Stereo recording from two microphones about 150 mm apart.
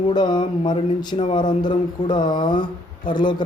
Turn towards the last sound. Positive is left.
turn(degrees=30)  # may be behind; listen again after turning